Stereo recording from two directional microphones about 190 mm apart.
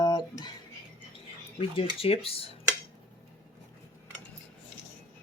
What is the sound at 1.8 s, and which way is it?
Speech, 30° left (ahead or behind).